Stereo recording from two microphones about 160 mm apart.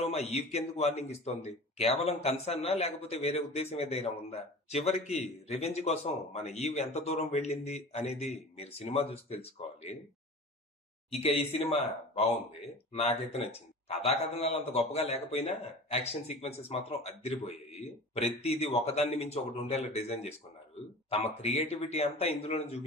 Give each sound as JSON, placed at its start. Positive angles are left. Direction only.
{"t": 0.0, "sound": "a man's voice", "side_deg": 40}
{"t": 11.1, "sound": "a man's voice", "side_deg": 40}